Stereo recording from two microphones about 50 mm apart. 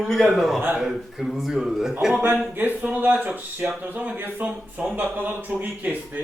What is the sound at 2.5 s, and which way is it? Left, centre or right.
A man's voice, right.